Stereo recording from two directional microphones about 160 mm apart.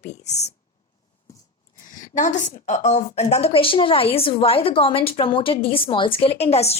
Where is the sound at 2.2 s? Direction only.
50° left (ahead or behind).